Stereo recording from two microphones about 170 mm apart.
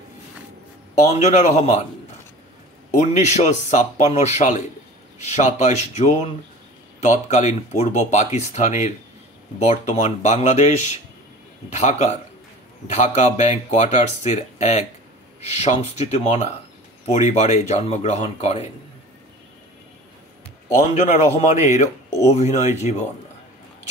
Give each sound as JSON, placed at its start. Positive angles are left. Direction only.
{"t": 1.2, "sound": "speech", "side_deg": 40}
{"t": 2.9, "sound": "speech", "side_deg": 45}
{"t": 20.6, "sound": "speech", "side_deg": 40}